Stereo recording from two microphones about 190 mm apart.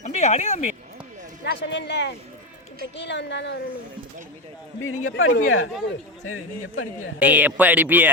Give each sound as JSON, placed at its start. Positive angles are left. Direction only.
{"t": 0.0, "sound": "a sound", "side_deg": 35}
{"t": 1.6, "sound": "a woman's voice", "side_deg": 65}
{"t": 4.8, "sound": "speech", "side_deg": 90}
{"t": 7.2, "sound": "speech", "side_deg": -10}